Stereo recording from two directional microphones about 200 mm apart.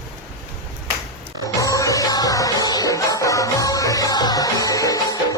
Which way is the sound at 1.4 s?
15° left (ahead or behind).